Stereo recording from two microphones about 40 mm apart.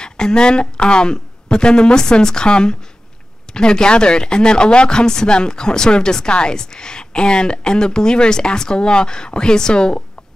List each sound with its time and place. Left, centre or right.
0.0 s speech: left